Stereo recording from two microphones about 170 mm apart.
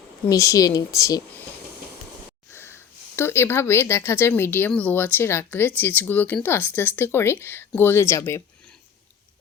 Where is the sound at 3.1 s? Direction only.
15° left (ahead or behind).